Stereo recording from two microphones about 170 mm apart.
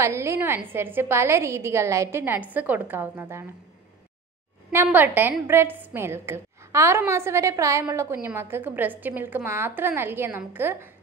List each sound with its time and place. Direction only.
0.0 s a woman's voice: 15° right (ahead or behind)
4.7 s a woman's voice: 10° right (ahead or behind)